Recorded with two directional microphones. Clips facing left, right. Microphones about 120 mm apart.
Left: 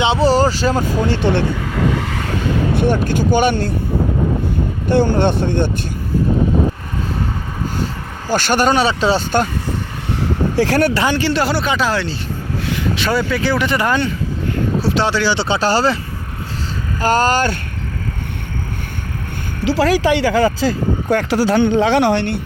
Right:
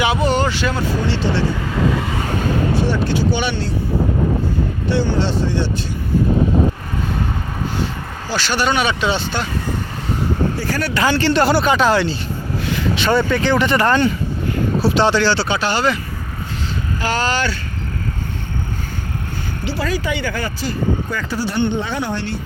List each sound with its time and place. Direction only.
0.0 s speech: 30° left (ahead or behind); by 1.5 s 55° left (ahead or behind)
2.7 s speech: 50° left (ahead or behind)
4.9 s speech: 50° left (ahead or behind)
8.3 s speech: 50° left (ahead or behind)
10.6 s speech: 75° left (ahead or behind)
11.0 s speech: 15° left (ahead or behind)
15.4 s speech: 30° left (ahead or behind)
17.0 s speech: 45° left (ahead or behind)
19.6 s speech: 90° left; by 22.4 s 65° left (ahead or behind)